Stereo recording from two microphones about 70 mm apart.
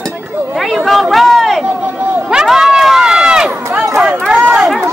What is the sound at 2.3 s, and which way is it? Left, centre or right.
Run, centre.